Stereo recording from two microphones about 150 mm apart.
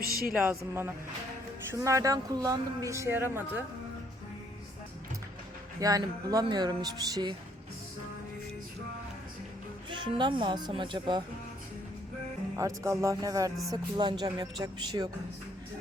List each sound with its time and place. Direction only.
0.4 s speech: 15° right (ahead or behind)
5.8 s speech: 25° right (ahead or behind)
9.9 s speech: 30° right (ahead or behind)
12.5 s speech: 20° right (ahead or behind)